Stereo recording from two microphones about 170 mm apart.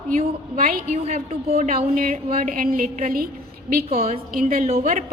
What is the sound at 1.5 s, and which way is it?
A woman's voice, 55° right (ahead or behind).